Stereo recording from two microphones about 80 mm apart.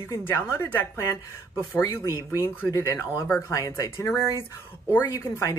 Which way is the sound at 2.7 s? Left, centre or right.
Left.